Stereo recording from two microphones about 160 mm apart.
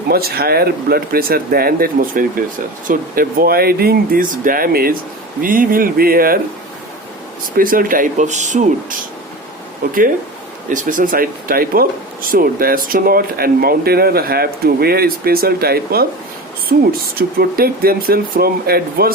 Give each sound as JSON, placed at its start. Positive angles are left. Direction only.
{"t": 0.1, "sound": "speech", "side_deg": -75}
{"t": 7.5, "sound": "speech", "side_deg": -60}
{"t": 9.8, "sound": "speech", "side_deg": -60}